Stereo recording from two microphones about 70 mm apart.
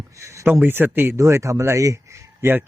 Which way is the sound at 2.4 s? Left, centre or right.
Right.